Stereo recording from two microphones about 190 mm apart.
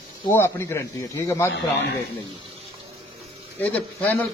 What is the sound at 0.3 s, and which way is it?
Speech, 15° left (ahead or behind).